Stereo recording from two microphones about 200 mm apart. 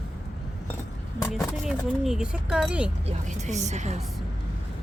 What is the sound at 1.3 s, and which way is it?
Speech, centre (ahead or behind).